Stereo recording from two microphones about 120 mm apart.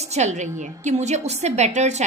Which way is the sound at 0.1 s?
75° right (ahead or behind).